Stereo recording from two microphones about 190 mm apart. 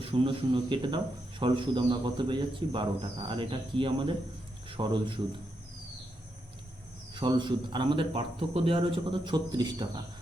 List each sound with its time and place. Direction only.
0.0 s speech: 30° right (ahead or behind)
7.1 s speech: 25° right (ahead or behind)